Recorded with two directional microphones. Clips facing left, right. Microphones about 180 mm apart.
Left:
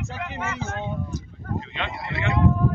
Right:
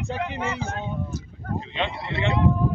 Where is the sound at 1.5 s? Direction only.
20° right (ahead or behind).